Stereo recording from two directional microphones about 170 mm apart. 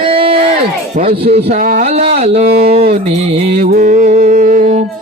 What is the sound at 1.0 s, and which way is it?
Speech, 45° right (ahead or behind).